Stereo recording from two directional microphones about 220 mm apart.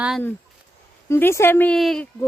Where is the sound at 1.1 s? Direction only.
10° left (ahead or behind).